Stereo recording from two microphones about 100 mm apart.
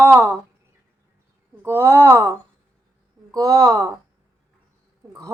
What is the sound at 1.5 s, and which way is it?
Speech, 25° right (ahead or behind).